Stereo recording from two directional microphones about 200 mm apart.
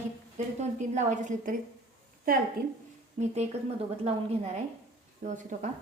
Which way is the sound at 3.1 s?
35° right (ahead or behind).